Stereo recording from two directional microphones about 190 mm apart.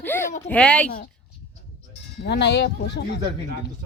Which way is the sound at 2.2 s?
60° left (ahead or behind).